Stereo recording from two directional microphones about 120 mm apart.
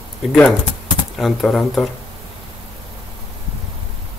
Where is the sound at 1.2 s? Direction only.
Centre (ahead or behind).